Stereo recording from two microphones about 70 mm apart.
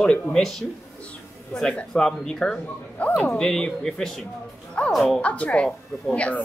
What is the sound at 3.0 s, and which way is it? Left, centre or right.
Speech, centre.